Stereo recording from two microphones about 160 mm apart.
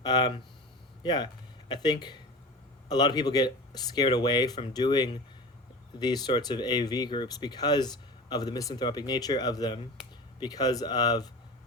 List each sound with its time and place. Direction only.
0.0 s speech: 25° left (ahead or behind)